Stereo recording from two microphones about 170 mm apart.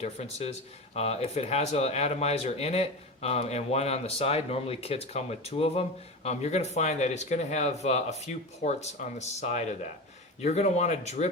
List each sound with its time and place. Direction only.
0.0 s speech: 40° left (ahead or behind)